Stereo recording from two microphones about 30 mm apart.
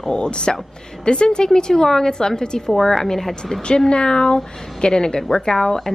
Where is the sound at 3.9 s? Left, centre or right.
Left; by 5.9 s centre.